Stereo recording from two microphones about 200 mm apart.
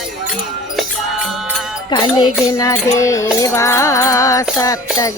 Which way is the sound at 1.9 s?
20° left (ahead or behind).